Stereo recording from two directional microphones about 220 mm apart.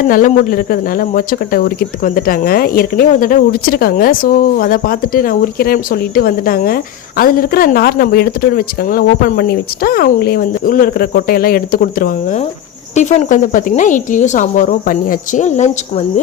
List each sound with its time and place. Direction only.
0.1 s speech: 40° left (ahead or behind)